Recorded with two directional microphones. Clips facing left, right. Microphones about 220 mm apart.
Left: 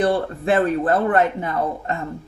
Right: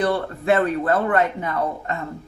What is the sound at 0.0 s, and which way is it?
Speech, 30° left (ahead or behind).